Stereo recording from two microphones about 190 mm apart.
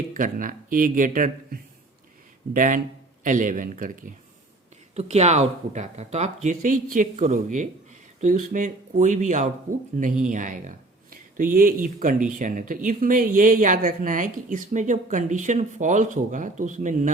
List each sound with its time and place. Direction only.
0.1 s speech: 45° right (ahead or behind)
4.9 s speech: 35° right (ahead or behind)